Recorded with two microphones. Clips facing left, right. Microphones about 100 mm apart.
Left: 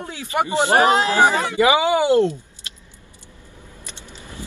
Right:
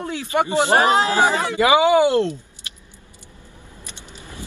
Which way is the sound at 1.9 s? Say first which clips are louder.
Even; 15° left (ahead or behind).